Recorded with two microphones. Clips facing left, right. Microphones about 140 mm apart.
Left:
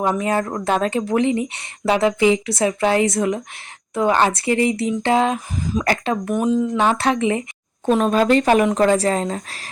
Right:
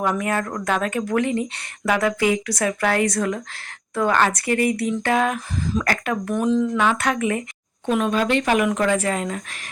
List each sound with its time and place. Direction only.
0.0 s speech: 25° left (ahead or behind)
6.8 s speech: 30° left (ahead or behind)
7.9 s speech: 35° left (ahead or behind)